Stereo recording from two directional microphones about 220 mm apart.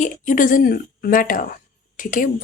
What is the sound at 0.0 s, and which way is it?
Speech, 35° left (ahead or behind).